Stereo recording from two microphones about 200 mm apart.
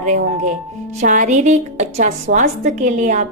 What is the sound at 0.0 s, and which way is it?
A woman's voice, 40° right (ahead or behind).